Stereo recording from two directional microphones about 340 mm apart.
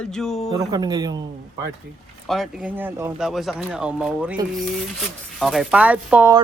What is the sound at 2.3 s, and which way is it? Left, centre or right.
Speech, centre.